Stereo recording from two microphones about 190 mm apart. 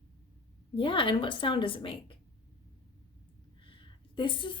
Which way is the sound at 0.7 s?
25° left (ahead or behind).